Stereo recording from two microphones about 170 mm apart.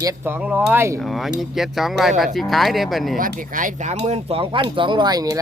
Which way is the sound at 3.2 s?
55° right (ahead or behind).